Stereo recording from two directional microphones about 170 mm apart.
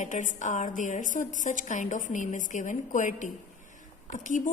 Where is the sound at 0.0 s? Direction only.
45° left (ahead or behind).